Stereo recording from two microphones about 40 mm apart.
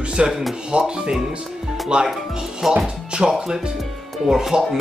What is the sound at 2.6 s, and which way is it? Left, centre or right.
Speech, centre.